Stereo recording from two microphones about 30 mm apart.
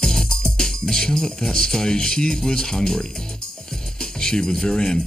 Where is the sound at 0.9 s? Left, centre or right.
Left.